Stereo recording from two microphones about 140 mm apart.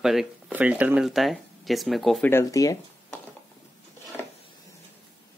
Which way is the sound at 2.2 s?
20° left (ahead or behind).